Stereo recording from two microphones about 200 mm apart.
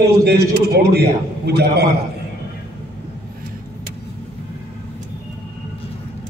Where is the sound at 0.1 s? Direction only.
55° right (ahead or behind).